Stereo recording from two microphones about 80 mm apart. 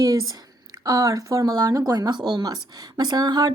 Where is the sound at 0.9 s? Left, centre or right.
Right.